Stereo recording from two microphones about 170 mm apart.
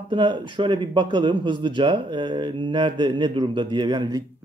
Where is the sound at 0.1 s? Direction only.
30° right (ahead or behind).